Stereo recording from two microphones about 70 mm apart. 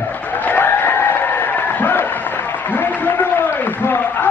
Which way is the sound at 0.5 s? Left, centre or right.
Left.